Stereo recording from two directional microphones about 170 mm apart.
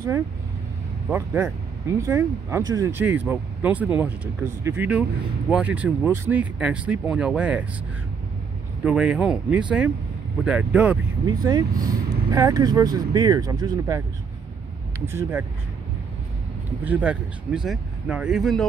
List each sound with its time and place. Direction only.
1.1 s speech: 15° right (ahead or behind)
8.8 s speech: 5° right (ahead or behind)
11.4 s speech: 20° right (ahead or behind)
15.0 s speech: 15° right (ahead or behind)
16.8 s speech: 10° right (ahead or behind)